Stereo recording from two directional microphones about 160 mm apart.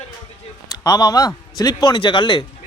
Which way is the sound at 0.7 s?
20° left (ahead or behind).